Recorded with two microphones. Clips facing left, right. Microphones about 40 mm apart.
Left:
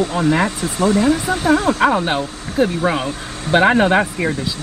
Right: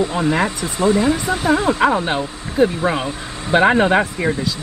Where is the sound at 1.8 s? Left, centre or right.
Centre.